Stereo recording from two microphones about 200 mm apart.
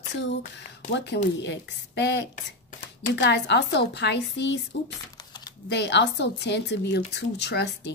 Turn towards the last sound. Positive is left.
turn(degrees=60)  # may be behind; listen again after turning